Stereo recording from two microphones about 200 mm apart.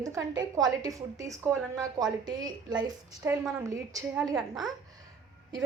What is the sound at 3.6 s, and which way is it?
Speech, 15° right (ahead or behind).